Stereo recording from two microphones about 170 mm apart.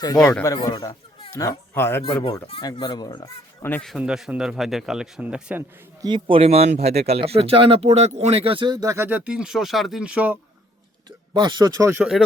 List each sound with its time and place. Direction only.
0.0 s speech: 20° left (ahead or behind)
2.5 s speech: 30° left (ahead or behind)
3.6 s speech: 10° left (ahead or behind)
3.9 s speech: 5° right (ahead or behind)
6.0 s speech: 25° right (ahead or behind); by 10.3 s 5° right (ahead or behind)
11.3 s speech: 25° right (ahead or behind)